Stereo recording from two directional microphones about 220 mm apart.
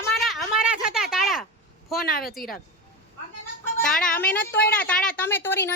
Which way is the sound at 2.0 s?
45° left (ahead or behind).